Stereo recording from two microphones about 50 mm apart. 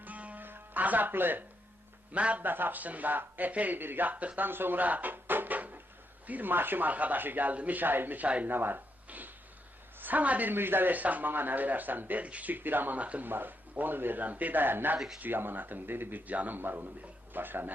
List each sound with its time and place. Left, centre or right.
0.0 s music: right
0.4 s music: right
2.1 s speech: right
2.4 s a man's voice: right
4.4 s a man's voice: right
8.4 s a man's voice: right
9.0 s a sound: right
10.0 s a man's voice: right
10.5 s a man's voice: right
13.0 s speech: right
13.2 s a man's voice: right
14.9 s speech: centre
15.2 s a man's voice: right
16.6 s a man's voice: right